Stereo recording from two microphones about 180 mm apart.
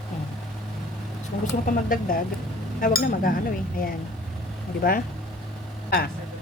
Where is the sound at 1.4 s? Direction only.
50° left (ahead or behind).